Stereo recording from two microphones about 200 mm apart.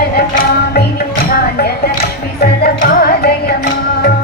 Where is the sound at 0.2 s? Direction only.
50° left (ahead or behind).